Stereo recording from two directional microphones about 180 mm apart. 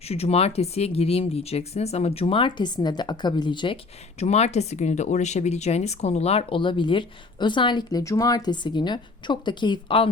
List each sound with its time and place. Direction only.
0.1 s speech: 35° left (ahead or behind)
4.2 s speech: 35° left (ahead or behind)